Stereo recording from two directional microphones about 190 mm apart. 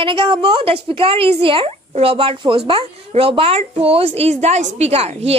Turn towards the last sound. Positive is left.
turn(degrees=-35)  # may be behind; listen again after turning